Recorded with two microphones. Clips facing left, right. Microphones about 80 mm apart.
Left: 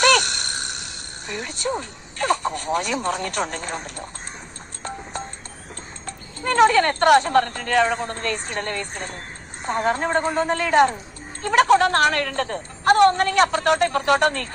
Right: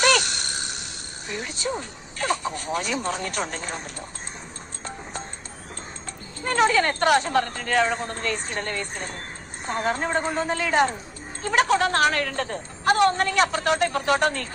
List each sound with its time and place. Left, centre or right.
0.0 s sigh: left
1.3 s a woman's voice: left
6.1 s a woman's voice: left